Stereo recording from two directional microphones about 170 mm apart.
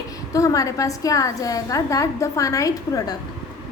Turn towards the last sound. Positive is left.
turn(degrees=20)  # may be behind; listen again after turning